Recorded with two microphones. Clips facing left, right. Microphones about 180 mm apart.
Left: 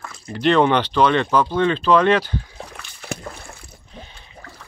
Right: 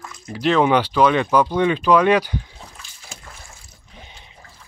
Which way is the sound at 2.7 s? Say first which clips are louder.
Left 10 dB; 65° left (ahead or behind).